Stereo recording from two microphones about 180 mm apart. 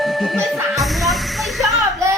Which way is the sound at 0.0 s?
Centre (ahead or behind).